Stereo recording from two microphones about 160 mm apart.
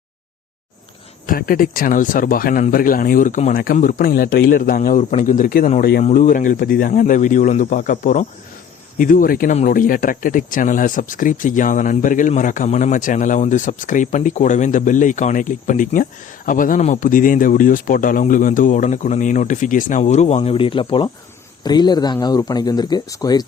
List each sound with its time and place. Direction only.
1.3 s speech: 65° left (ahead or behind)
6.0 s speech: 50° left (ahead or behind)
9.5 s speech: 55° left (ahead or behind); by 23.5 s 25° left (ahead or behind)